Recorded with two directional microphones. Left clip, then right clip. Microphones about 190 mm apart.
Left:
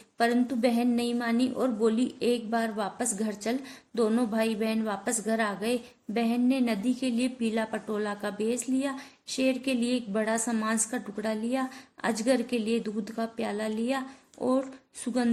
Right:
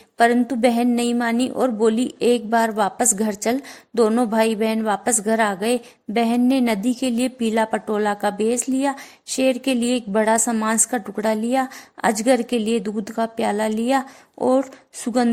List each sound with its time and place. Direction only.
0.2 s a woman's voice: 40° right (ahead or behind)